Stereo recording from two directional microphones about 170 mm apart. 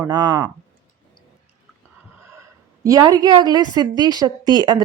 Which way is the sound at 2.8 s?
20° right (ahead or behind).